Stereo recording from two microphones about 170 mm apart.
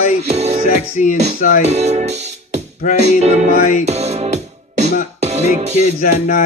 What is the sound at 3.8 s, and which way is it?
Music, 40° right (ahead or behind).